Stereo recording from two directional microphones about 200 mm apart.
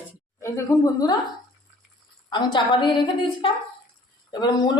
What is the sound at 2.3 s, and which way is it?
A woman's voice, 25° left (ahead or behind).